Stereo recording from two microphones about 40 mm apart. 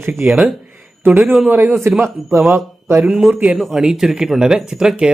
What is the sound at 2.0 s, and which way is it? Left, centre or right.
A man's voice, right.